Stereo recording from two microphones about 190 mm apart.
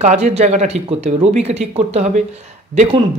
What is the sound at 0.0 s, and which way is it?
Speech, 35° right (ahead or behind).